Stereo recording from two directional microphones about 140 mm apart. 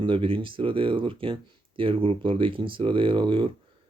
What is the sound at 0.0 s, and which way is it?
Speech, 40° right (ahead or behind).